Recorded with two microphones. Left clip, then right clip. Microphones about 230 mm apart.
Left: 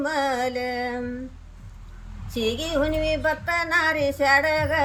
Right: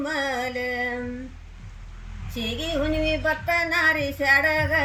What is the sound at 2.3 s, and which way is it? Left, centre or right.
Female singing, left.